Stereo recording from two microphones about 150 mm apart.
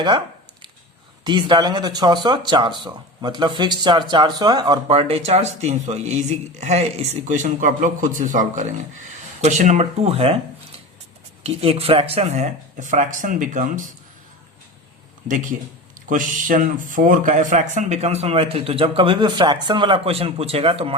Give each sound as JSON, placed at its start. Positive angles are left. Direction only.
{"t": 1.2, "sound": "speech", "side_deg": -30}
{"t": 4.9, "sound": "speech", "side_deg": -40}
{"t": 11.4, "sound": "speech", "side_deg": -40}
{"t": 16.0, "sound": "speech", "side_deg": -60}